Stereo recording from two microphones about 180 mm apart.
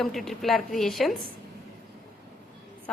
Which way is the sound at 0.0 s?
Centre (ahead or behind).